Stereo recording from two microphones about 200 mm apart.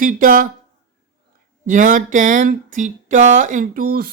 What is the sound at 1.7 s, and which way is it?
Speech, 40° right (ahead or behind).